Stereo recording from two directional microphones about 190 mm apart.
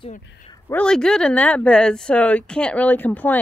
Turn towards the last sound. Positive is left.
turn(degrees=10)  # may be behind; listen again after turning